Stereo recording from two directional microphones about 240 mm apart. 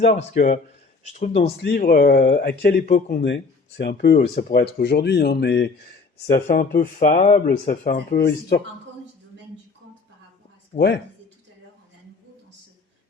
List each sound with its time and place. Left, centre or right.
0.0 s speech: left
1.5 s speech: left
2.9 s speech: left
3.2 s speech: left
4.2 s speech: left
10.8 s speech: left